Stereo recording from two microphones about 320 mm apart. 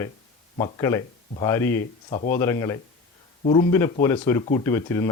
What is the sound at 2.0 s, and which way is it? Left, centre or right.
Speech, left.